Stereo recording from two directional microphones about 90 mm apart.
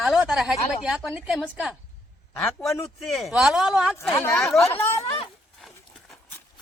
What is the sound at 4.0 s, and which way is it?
Speech, 30° left (ahead or behind).